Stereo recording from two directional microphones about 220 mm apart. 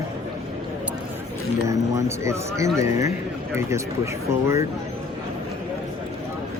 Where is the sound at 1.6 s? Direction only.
15° right (ahead or behind).